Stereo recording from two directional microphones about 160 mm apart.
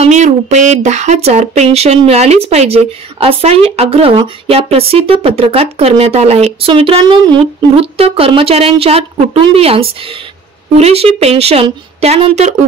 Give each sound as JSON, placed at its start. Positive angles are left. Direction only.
{"t": 0.0, "sound": "speech", "side_deg": -50}